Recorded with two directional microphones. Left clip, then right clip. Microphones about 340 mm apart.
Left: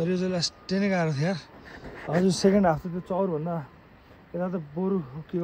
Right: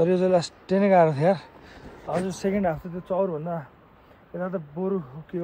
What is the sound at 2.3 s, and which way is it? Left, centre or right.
Speech, left.